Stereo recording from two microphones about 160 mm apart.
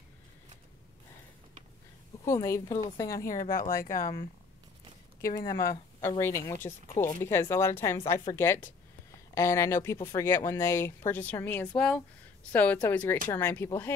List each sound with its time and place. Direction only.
2.2 s speech: 20° left (ahead or behind)
3.3 s speech: 60° left (ahead or behind)
5.5 s speech: 20° left (ahead or behind)